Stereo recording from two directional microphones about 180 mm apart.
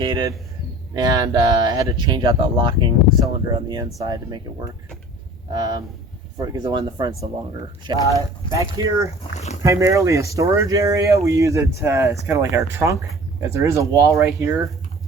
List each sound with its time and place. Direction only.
0.0 s speech: 25° right (ahead or behind)